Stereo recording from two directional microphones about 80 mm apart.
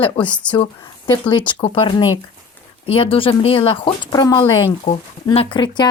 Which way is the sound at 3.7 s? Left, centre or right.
Left.